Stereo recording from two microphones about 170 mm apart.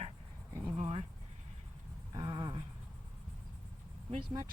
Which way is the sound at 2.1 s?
25° right (ahead or behind).